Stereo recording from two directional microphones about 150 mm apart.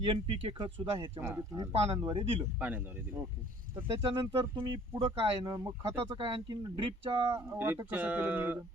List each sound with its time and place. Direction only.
0.0 s speech: 35° right (ahead or behind)
1.2 s speech: 20° right (ahead or behind)
2.0 s speech: 35° right (ahead or behind)
2.6 s speech: 10° right (ahead or behind)
3.8 s speech: 35° right (ahead or behind)
7.3 s speech: 20° right (ahead or behind)